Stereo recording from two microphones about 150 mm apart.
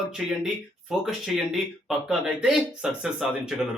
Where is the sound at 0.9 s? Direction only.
5° right (ahead or behind).